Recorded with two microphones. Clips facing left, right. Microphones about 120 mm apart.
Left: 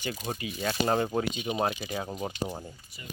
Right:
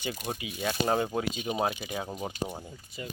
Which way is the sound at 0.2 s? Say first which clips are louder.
Left 1 dB; 10° right (ahead or behind).